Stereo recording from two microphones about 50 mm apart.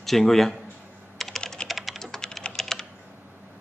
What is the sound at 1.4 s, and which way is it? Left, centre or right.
Typing, centre.